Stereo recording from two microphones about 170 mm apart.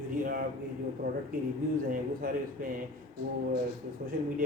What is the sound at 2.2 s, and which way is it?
Speech, 60° right (ahead or behind).